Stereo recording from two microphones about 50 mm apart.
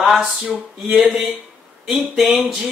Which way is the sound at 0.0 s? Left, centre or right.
Centre.